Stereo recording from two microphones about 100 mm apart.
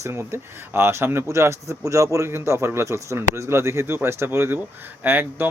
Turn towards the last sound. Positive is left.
turn(degrees=-20)  # may be behind; listen again after turning